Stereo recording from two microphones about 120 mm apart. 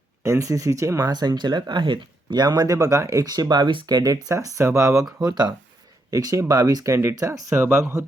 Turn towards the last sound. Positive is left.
turn(degrees=-20)  # may be behind; listen again after turning